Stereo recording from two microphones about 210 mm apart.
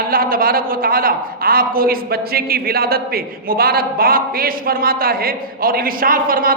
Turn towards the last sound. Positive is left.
turn(degrees=-40)  # may be behind; listen again after turning